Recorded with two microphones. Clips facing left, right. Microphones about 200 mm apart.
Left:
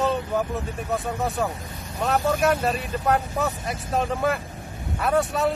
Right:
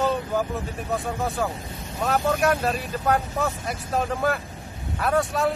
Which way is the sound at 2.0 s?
Centre (ahead or behind).